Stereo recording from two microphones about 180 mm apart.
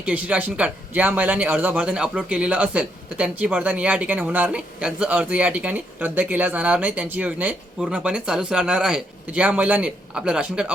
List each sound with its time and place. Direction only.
0.0 s speech: 10° right (ahead or behind)